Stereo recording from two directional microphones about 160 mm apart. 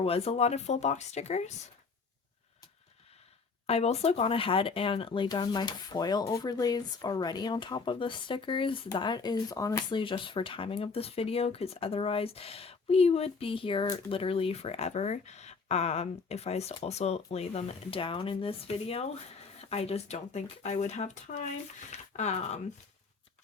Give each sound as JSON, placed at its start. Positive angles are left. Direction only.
{"t": 0.0, "sound": "speech", "side_deg": 40}
{"t": 3.7, "sound": "speech", "side_deg": 40}
{"t": 10.0, "sound": "speech", "side_deg": 30}